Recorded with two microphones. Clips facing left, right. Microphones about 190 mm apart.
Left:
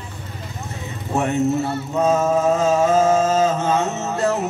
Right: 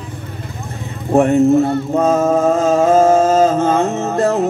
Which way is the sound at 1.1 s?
55° right (ahead or behind).